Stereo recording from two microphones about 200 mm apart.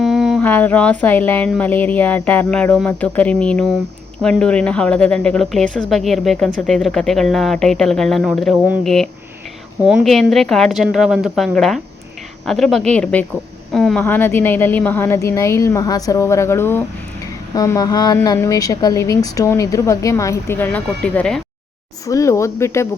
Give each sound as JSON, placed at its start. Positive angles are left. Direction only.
{"t": 0.0, "sound": "a woman's voice", "side_deg": 0}
{"t": 22.0, "sound": "a woman's voice", "side_deg": 15}